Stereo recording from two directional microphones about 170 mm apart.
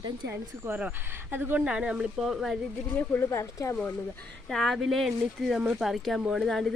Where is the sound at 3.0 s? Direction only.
15° left (ahead or behind).